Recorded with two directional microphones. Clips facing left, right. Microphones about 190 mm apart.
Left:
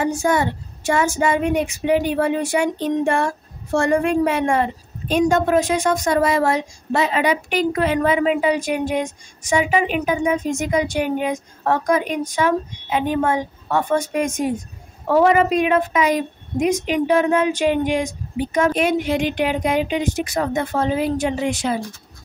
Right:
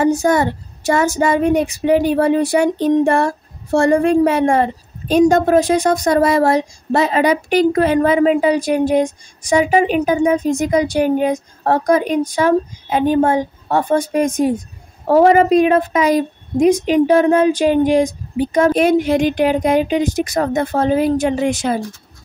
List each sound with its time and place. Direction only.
0.0 s speech: 40° right (ahead or behind)